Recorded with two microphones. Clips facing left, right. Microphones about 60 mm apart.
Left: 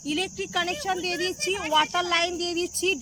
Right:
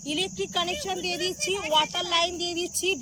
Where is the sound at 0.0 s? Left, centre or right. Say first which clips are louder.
Left 1 dB; left.